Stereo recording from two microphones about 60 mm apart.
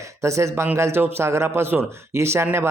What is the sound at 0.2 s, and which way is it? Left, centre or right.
Speech, right.